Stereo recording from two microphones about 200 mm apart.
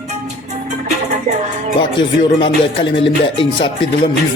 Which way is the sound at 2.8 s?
65° left (ahead or behind).